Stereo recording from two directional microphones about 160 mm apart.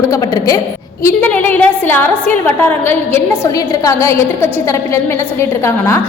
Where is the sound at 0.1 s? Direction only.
20° left (ahead or behind).